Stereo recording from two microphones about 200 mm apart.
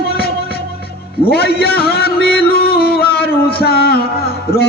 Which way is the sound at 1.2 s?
50° left (ahead or behind).